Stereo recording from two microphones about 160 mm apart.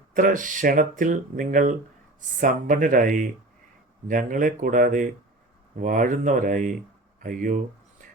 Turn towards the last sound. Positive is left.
turn(degrees=-50)  # may be behind; listen again after turning